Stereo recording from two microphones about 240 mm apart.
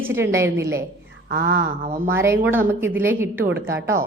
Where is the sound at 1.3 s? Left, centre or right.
Right.